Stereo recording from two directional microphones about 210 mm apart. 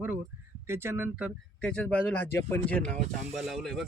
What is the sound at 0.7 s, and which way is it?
Speech, 10° right (ahead or behind).